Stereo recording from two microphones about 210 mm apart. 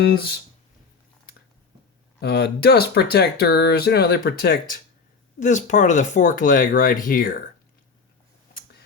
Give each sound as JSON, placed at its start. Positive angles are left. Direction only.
{"t": 0.0, "sound": "speech", "side_deg": 50}
{"t": 2.2, "sound": "speech", "side_deg": 50}